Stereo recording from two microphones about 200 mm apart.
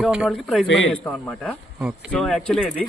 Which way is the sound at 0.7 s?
70° left (ahead or behind).